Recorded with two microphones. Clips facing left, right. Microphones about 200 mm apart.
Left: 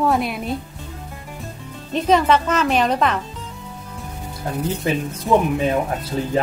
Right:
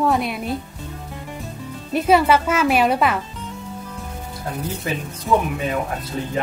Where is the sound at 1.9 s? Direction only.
10° right (ahead or behind).